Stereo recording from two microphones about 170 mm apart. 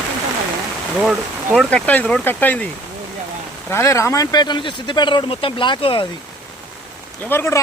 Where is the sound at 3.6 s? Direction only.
15° left (ahead or behind).